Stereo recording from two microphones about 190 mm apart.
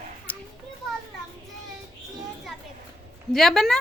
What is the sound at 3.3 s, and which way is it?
Speech, centre (ahead or behind).